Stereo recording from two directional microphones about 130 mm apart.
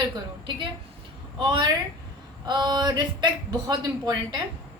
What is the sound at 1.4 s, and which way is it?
A woman's voice, 35° right (ahead or behind).